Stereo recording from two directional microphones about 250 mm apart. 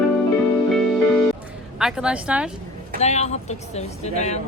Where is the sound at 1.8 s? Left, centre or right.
Centre.